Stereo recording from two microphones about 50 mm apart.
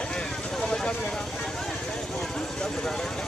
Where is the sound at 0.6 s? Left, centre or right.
Centre.